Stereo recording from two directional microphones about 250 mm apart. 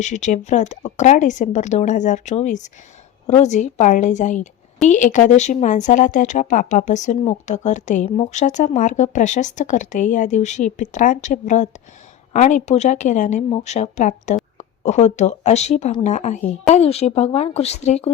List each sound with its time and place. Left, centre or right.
0.0 s speech: left